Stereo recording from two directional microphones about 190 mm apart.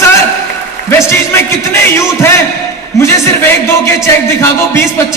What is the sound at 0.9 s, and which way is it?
A woman's voice, 15° left (ahead or behind).